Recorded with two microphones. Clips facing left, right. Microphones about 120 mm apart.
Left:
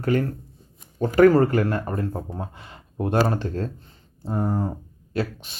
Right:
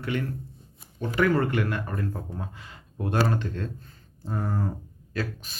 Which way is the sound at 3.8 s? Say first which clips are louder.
Left 5 dB; 25° left (ahead or behind).